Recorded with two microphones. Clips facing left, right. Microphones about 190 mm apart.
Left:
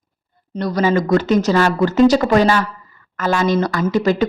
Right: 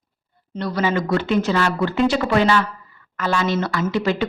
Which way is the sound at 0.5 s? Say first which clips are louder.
Left 5 dB; 40° left (ahead or behind).